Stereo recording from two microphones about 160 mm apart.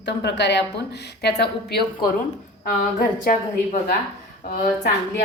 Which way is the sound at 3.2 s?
55° left (ahead or behind).